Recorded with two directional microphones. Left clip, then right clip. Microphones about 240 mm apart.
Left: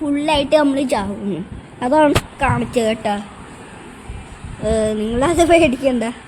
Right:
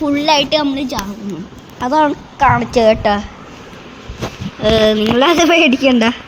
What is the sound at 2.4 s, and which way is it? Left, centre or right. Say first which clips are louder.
Speech: right 10 dB; centre.